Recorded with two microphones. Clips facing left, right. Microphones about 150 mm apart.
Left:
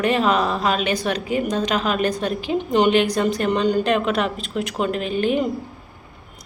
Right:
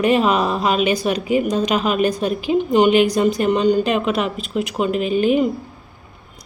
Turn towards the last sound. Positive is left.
turn(degrees=-10)  # may be behind; listen again after turning